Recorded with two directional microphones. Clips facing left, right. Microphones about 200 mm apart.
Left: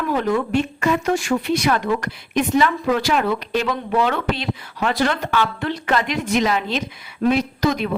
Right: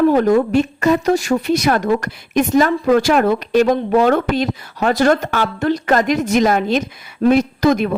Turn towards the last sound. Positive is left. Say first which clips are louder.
# right 6 dB
turn(degrees=-50)  # may be behind; listen again after turning